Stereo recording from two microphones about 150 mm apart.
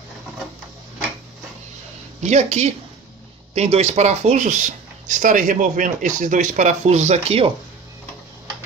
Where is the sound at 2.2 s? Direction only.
50° right (ahead or behind).